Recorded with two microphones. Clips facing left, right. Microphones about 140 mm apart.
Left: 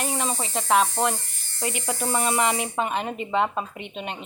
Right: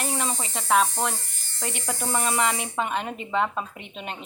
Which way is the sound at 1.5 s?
5° left (ahead or behind).